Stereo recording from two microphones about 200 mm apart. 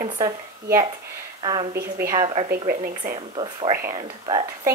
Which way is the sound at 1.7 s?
45° right (ahead or behind).